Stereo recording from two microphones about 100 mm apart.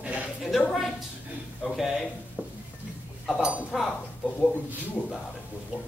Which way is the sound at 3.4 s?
10° right (ahead or behind).